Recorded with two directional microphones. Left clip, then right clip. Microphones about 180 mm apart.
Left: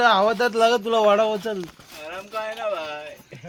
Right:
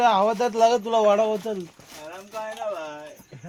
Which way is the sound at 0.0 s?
30° left (ahead or behind).